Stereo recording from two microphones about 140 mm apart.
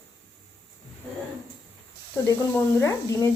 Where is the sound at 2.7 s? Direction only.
20° left (ahead or behind).